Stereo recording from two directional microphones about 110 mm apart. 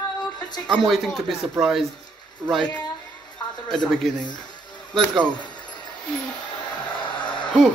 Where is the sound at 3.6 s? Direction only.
5° left (ahead or behind).